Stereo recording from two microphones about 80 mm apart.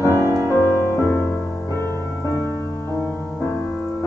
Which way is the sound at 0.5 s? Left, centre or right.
Left.